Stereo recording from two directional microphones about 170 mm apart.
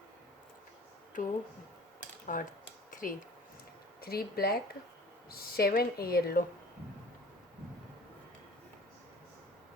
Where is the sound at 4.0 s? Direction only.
65° left (ahead or behind).